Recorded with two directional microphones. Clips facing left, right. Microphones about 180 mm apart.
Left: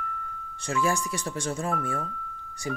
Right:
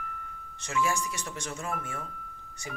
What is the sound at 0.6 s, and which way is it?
Speech, 35° left (ahead or behind).